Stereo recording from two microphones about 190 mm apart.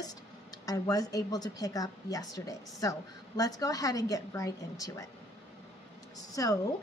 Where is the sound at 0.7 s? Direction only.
20° left (ahead or behind).